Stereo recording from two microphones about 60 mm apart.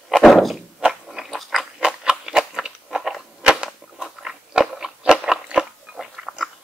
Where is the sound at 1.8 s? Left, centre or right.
Centre.